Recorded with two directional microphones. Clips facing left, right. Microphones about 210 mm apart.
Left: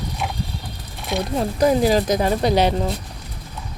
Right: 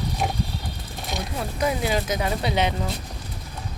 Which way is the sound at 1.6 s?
35° left (ahead or behind).